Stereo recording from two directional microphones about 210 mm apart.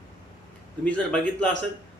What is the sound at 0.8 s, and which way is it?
Speech, 5° left (ahead or behind).